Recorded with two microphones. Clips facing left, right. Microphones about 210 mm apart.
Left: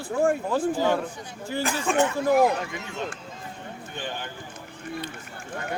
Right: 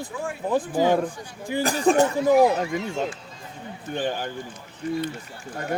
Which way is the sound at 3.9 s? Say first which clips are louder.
Right 8 dB; 45° right (ahead or behind).